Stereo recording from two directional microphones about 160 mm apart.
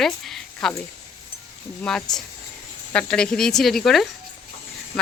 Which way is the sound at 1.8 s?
5° left (ahead or behind).